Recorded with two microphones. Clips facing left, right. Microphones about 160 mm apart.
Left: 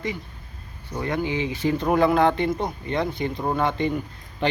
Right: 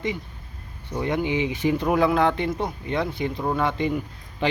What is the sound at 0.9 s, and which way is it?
Speech, 20° right (ahead or behind).